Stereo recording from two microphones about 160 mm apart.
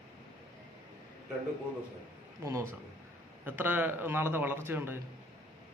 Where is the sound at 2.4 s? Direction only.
15° right (ahead or behind).